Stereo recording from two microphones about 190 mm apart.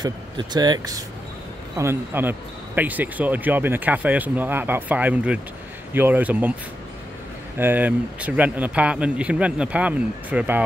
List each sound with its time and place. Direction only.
0.0 s speech: 20° right (ahead or behind)
7.5 s speech: 10° right (ahead or behind)